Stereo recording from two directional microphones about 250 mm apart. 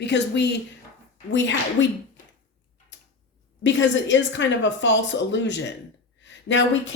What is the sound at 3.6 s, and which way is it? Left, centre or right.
Speech, left.